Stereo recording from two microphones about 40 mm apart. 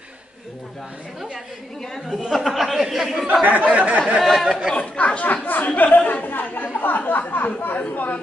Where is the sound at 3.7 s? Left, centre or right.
Right.